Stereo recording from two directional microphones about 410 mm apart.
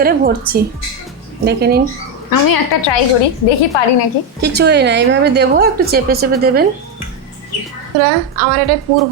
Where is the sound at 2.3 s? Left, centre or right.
Left.